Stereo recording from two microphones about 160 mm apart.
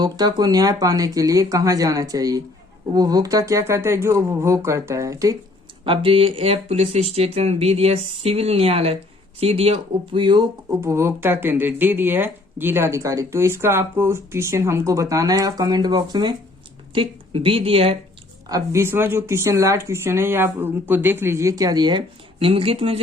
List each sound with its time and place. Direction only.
0.0 s speech: 25° right (ahead or behind)
5.8 s speech: 35° right (ahead or behind)
10.8 s speech: 15° right (ahead or behind); by 17.9 s 35° right (ahead or behind)
18.4 s speech: 20° right (ahead or behind); by 23.0 s 35° right (ahead or behind)